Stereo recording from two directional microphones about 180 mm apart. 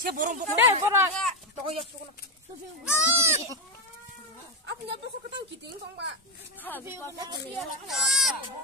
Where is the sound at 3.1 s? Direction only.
15° right (ahead or behind).